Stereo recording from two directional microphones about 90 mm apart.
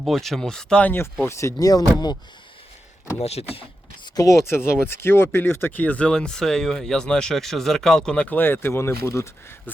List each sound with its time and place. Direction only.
0.0 s speech: centre (ahead or behind)
1.3 s speech: 35° left (ahead or behind)
4.0 s speech: 45° left (ahead or behind)